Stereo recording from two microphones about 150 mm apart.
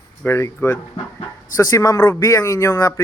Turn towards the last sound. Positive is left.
turn(degrees=20)  # may be behind; listen again after turning